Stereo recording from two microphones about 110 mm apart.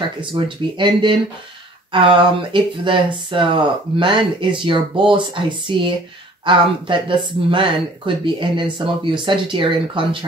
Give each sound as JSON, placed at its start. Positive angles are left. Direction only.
{"t": 0.2, "sound": "speech", "side_deg": -50}